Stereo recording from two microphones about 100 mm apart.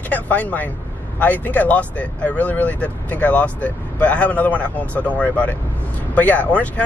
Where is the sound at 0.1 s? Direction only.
15° left (ahead or behind).